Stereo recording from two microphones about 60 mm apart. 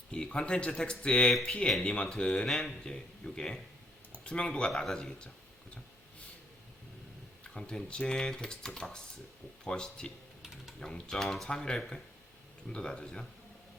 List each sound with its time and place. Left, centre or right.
0.1 s speech: centre
7.4 s speech: centre
10.4 s typing: centre
10.8 s speech: centre